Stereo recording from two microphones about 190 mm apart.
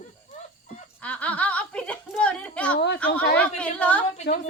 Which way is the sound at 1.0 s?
5° left (ahead or behind).